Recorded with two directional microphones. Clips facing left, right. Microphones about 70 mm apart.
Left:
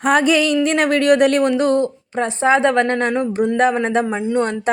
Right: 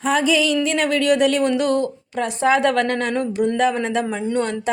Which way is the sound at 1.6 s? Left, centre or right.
Left.